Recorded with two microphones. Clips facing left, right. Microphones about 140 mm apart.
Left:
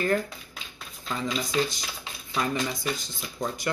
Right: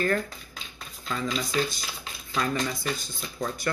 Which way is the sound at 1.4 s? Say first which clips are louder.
Left 1 dB; 20° left (ahead or behind).